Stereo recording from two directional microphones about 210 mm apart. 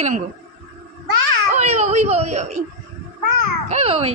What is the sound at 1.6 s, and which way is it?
Speech, 30° right (ahead or behind).